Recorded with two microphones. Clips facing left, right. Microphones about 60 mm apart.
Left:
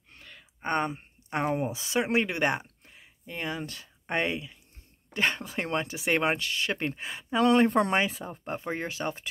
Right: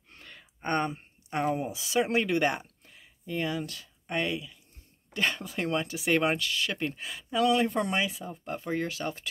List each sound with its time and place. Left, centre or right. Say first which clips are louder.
0.2 s a sound: right 1 dB; centre
0.6 s speech: left 1 dB; centre; by 8.5 s left
8.5 s speech: right 2 dB; left